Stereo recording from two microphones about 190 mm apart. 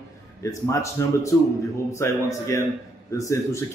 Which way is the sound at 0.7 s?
15° left (ahead or behind).